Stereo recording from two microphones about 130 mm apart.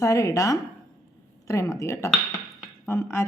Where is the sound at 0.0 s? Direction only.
25° left (ahead or behind).